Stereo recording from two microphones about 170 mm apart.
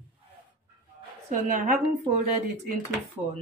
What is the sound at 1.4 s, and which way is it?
Speech, 50° right (ahead or behind).